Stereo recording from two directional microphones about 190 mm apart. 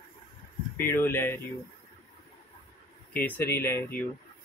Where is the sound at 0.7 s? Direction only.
10° left (ahead or behind).